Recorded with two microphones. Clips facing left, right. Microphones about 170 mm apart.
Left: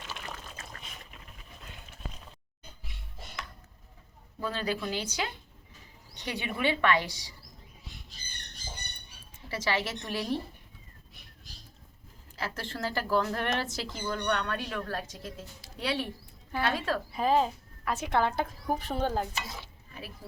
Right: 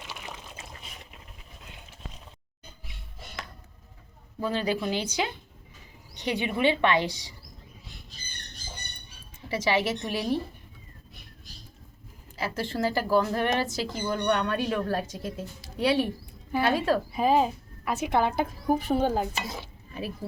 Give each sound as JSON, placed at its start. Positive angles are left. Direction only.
{"t": 0.0, "sound": "pour", "side_deg": -10}
{"t": 4.4, "sound": "a woman's voice", "side_deg": -15}
{"t": 9.5, "sound": "a woman's voice", "side_deg": -15}
{"t": 12.4, "sound": "a woman's voice", "side_deg": -10}
{"t": 14.0, "sound": "a woman's voice", "side_deg": -15}
{"t": 19.5, "sound": "stir", "side_deg": -25}